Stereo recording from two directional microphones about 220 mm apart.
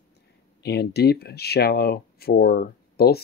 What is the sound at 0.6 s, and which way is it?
Speech, 50° left (ahead or behind).